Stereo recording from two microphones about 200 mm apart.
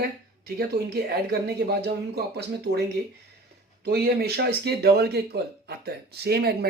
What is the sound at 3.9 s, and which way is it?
Speech, 50° right (ahead or behind).